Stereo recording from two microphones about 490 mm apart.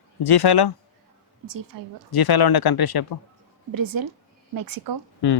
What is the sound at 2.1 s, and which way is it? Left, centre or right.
Speech, left.